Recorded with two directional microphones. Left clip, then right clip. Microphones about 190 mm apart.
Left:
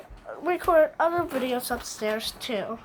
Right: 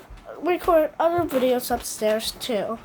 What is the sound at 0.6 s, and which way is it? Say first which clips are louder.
A woman's voice: right 1 dB; 15° right (ahead or behind).